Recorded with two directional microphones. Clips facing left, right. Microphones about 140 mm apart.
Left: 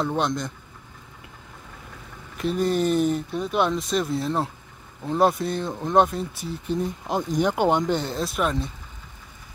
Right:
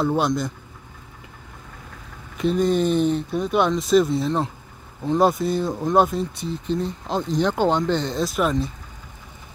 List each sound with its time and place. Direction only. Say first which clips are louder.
0.0 s speech: right 4 dB; 5° right (ahead or behind)
2.3 s speech: right 3 dB; 5° left (ahead or behind)